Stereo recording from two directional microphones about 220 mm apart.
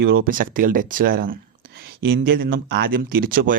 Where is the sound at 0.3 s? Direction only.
40° right (ahead or behind).